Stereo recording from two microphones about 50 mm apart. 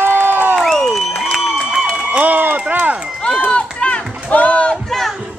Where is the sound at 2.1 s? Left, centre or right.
Right.